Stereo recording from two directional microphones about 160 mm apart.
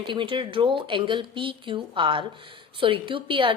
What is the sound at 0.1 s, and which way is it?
A woman's voice, 30° right (ahead or behind).